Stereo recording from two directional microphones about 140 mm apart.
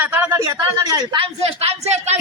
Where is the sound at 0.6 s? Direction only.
25° right (ahead or behind).